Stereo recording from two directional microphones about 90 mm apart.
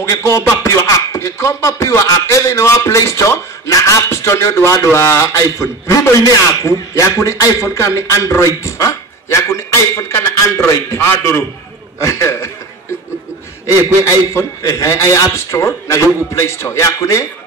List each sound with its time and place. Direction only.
0.1 s speech: 35° left (ahead or behind)
14.3 s speech: 35° left (ahead or behind)